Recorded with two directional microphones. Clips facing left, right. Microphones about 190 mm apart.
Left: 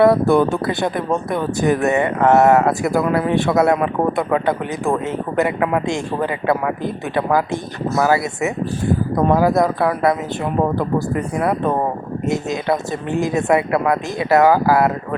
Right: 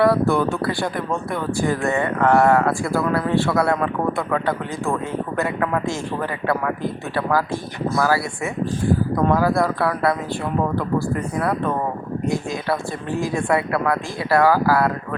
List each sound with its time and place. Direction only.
0.0 s speech: 25° left (ahead or behind)